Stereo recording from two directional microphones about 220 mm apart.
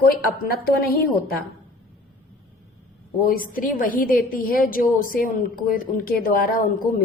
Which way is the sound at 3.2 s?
40° left (ahead or behind).